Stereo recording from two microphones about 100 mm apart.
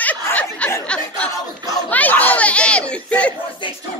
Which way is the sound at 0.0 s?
15° left (ahead or behind).